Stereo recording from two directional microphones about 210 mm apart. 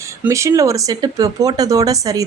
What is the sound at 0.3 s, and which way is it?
A woman's voice, 15° right (ahead or behind).